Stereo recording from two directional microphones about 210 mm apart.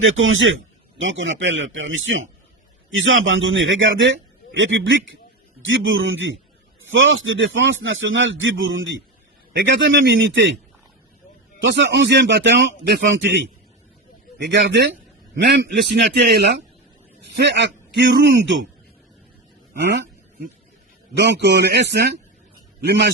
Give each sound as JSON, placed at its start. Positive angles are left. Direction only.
{"t": 0.0, "sound": "a man's voice", "side_deg": -65}
{"t": 11.6, "sound": "a man's voice", "side_deg": -55}
{"t": 19.8, "sound": "a man's voice", "side_deg": -55}
{"t": 21.4, "sound": "a man's voice", "side_deg": -50}